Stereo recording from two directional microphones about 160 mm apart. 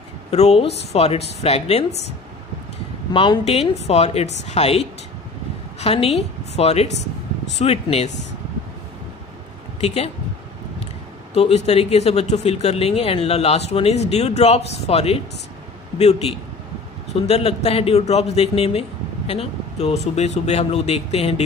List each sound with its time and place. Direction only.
0.3 s a man's voice: 40° left (ahead or behind)
3.1 s a man's voice: 30° left (ahead or behind)
9.8 s speech: 40° left (ahead or behind)
11.3 s a man's voice: 40° left (ahead or behind)
17.1 s a man's voice: 40° left (ahead or behind)